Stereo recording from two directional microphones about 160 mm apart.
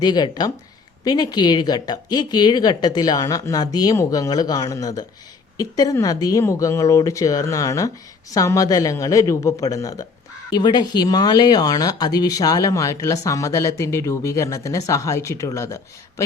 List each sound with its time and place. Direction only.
0.0 s speech: 25° left (ahead or behind)